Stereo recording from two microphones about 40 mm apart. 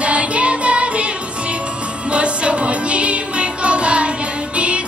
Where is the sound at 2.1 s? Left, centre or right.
Right.